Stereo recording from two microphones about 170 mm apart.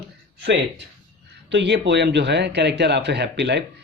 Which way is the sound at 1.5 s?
90° right.